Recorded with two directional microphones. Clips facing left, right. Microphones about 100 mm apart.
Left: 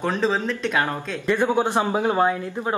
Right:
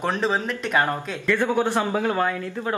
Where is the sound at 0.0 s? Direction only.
10° right (ahead or behind).